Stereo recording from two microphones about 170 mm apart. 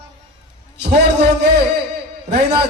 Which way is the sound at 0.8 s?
75° right (ahead or behind).